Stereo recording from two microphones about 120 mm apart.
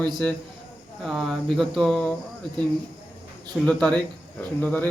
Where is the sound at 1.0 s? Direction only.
Centre (ahead or behind).